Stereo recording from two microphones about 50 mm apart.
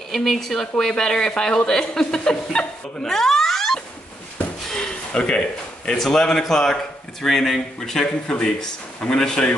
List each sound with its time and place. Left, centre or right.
0.1 s speech: centre
4.7 s a sound: centre
5.9 s speech: centre